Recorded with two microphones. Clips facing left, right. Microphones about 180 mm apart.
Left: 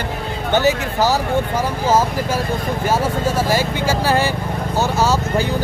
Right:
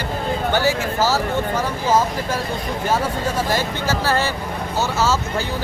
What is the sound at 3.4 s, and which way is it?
Speech, 10° left (ahead or behind).